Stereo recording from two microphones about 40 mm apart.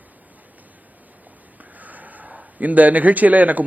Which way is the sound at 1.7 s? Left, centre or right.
Right.